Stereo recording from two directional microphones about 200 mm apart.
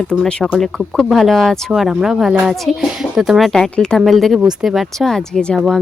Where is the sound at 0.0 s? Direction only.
5° left (ahead or behind).